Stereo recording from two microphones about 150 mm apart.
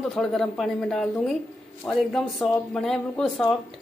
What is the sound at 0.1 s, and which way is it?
Speech, centre (ahead or behind).